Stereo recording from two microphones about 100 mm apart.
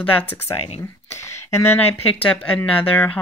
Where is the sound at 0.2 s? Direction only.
20° left (ahead or behind).